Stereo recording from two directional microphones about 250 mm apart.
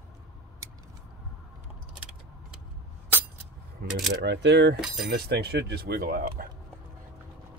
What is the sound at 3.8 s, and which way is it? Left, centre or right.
Speech, right.